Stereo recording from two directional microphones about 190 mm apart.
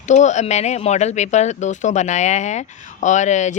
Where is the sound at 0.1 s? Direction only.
40° left (ahead or behind).